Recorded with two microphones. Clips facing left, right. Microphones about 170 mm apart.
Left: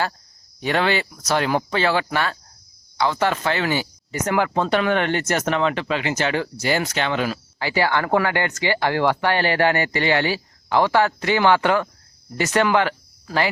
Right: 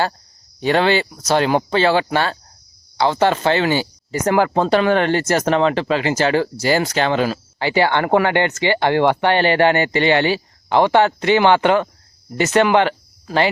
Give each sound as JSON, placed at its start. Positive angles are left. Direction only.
{"t": 0.6, "sound": "speech", "side_deg": -30}